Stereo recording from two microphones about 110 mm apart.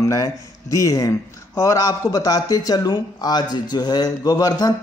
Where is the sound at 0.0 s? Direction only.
30° left (ahead or behind).